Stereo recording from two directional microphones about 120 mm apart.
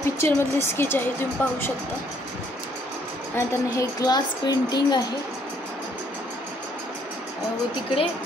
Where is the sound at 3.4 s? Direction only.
30° left (ahead or behind).